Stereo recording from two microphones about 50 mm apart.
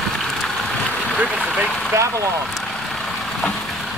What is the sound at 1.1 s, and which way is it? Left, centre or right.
Speech, right.